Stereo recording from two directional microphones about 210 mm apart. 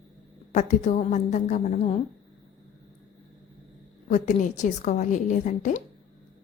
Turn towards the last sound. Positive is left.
turn(degrees=35)  # may be behind; listen again after turning